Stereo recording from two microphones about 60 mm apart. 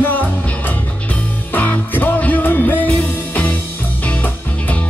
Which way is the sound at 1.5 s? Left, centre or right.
Left.